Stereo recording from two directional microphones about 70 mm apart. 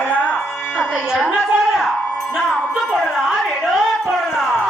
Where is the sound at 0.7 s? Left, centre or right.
Centre.